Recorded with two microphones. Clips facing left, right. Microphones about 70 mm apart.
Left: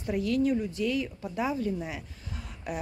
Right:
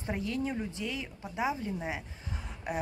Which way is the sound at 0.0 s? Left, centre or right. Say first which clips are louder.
Left 7 dB; right.